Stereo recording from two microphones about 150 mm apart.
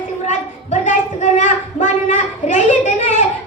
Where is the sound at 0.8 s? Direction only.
55° left (ahead or behind).